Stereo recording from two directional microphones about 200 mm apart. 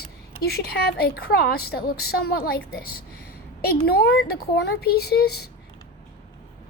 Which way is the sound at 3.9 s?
55° left (ahead or behind).